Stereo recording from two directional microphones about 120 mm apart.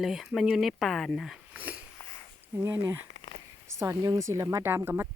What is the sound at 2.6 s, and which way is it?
Speech, 20° right (ahead or behind).